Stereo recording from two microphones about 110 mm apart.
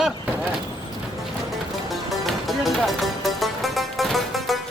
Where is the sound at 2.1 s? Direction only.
Centre (ahead or behind).